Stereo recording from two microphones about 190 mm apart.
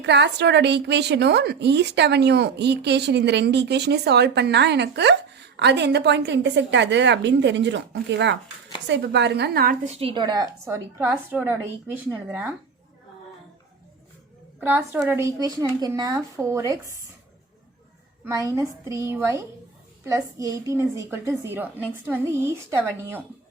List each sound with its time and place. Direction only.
0.0 s a woman's voice: 65° right (ahead or behind)
9.8 s a woman's voice: 35° right (ahead or behind); by 12.5 s 10° right (ahead or behind)
15.0 s a woman's voice: 15° right (ahead or behind)
18.3 s a woman's voice: 15° right (ahead or behind)